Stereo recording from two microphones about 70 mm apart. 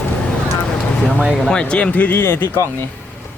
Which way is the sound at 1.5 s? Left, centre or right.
Centre.